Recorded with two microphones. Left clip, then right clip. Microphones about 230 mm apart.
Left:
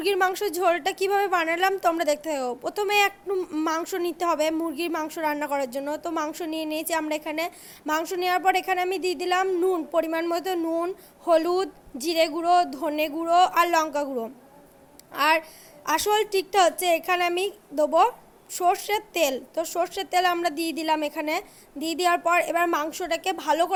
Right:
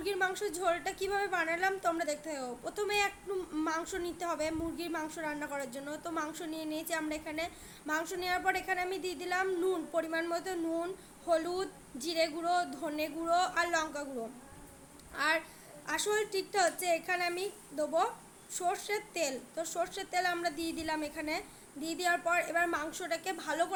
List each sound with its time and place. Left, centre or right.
0.0 s a woman's voice: left
15.1 s a woman's voice: left